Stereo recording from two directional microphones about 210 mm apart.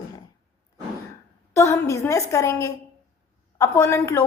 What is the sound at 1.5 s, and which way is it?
A woman's voice, 15° left (ahead or behind).